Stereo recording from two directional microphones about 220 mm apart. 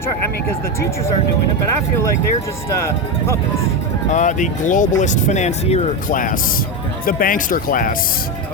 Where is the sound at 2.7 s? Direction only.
15° left (ahead or behind).